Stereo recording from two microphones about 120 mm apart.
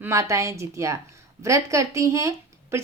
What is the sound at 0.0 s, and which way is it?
A woman's voice, 25° right (ahead or behind).